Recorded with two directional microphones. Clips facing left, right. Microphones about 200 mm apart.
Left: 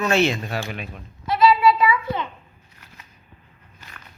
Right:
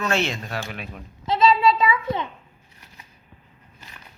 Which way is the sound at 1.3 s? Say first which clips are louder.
Left 1 dB; 25° right (ahead or behind).